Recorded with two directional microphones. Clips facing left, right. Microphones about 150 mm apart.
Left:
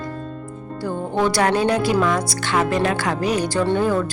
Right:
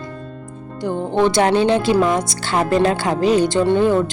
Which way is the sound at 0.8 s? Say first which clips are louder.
Right 4 dB; 20° right (ahead or behind).